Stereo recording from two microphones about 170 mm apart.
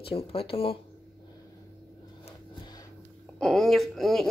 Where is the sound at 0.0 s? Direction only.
35° left (ahead or behind).